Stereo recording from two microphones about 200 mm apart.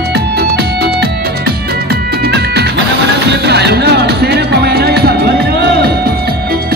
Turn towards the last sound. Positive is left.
turn(degrees=-50)  # may be behind; listen again after turning